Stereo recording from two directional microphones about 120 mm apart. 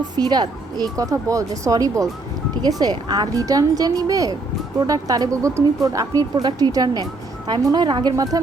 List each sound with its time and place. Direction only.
0.0 s speech: 35° right (ahead or behind)